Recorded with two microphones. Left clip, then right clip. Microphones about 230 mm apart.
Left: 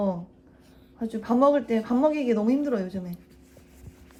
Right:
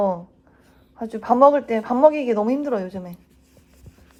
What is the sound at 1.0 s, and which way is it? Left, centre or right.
Speech, centre.